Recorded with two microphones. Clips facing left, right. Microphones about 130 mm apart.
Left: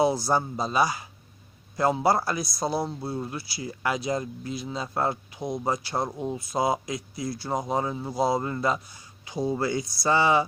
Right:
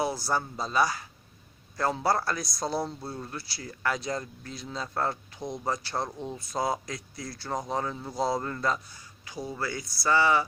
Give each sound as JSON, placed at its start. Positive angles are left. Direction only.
{"t": 0.0, "sound": "speech", "side_deg": 20}